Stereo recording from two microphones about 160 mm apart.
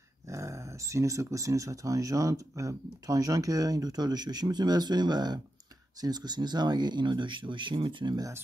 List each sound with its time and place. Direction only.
0.3 s speech: 20° right (ahead or behind)